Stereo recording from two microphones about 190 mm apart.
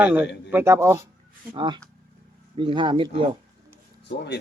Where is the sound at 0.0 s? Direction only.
10° right (ahead or behind).